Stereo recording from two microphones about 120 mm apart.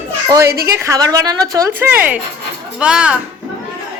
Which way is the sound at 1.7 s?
15° right (ahead or behind).